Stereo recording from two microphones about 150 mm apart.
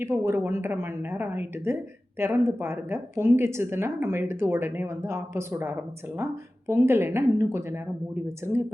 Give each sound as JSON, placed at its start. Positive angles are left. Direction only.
{"t": 0.0, "sound": "a woman's voice", "side_deg": -15}